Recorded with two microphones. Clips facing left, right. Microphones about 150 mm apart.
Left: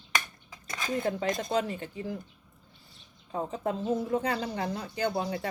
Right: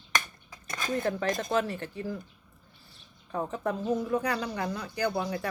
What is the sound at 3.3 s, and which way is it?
Speech, 20° left (ahead or behind).